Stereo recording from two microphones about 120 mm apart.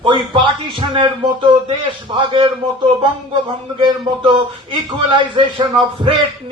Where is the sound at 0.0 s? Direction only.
45° right (ahead or behind).